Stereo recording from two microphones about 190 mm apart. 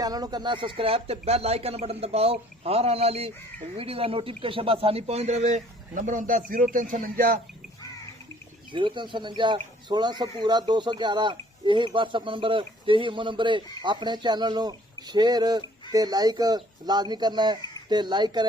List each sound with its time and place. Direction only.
0.0 s speech: 20° right (ahead or behind); by 7.3 s 45° right (ahead or behind)
8.7 s speech: 25° right (ahead or behind)